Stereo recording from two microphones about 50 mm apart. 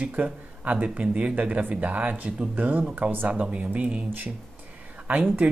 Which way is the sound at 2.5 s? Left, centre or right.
Right.